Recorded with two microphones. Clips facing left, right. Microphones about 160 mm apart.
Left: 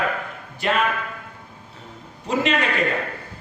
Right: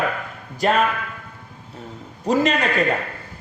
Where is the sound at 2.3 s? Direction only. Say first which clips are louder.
Right 4 dB; 40° right (ahead or behind).